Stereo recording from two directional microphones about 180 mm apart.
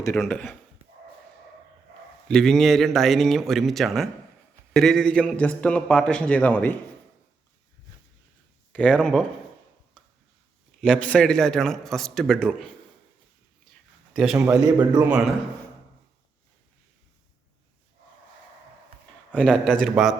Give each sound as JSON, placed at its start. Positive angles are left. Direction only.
{"t": 0.2, "sound": "speech", "side_deg": 10}
{"t": 2.2, "sound": "a man's voice", "side_deg": 5}
{"t": 8.7, "sound": "a man's voice", "side_deg": 5}
{"t": 10.8, "sound": "a man's voice", "side_deg": 5}
{"t": 14.1, "sound": "a man's voice", "side_deg": 0}
{"t": 15.1, "sound": "a man's voice", "side_deg": -5}
{"t": 19.3, "sound": "a man's voice", "side_deg": 5}